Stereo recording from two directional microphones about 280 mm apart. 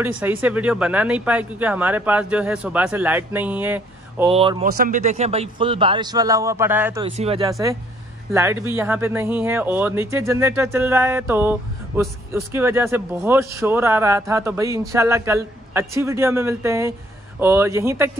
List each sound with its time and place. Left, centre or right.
0.0 s speech: centre
4.3 s speech: right
4.6 s speech: right; by 7.0 s centre
7.0 s speech: right